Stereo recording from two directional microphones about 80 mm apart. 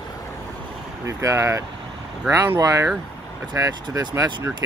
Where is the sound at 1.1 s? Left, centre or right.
Right.